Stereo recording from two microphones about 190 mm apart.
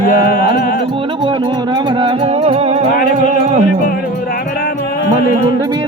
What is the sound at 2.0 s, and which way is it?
Music, 30° right (ahead or behind).